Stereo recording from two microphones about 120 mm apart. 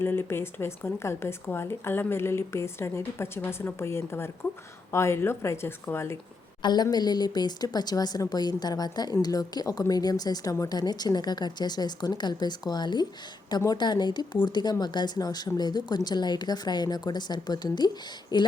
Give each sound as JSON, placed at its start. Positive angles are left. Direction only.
{"t": 0.0, "sound": "speech", "side_deg": 20}
{"t": 6.6, "sound": "a woman's voice", "side_deg": 35}